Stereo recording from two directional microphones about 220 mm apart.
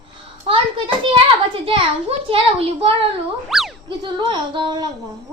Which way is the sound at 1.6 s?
25° right (ahead or behind).